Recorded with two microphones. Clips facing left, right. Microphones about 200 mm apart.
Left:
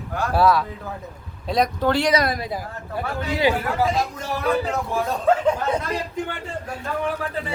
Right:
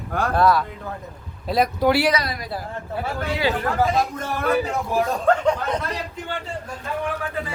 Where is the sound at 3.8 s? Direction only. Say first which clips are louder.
Right 3 dB; centre (ahead or behind).